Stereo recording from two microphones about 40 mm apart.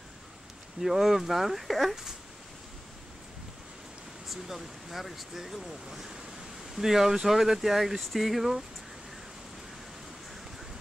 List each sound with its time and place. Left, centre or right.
0.7 s speech: centre
4.3 s speech: centre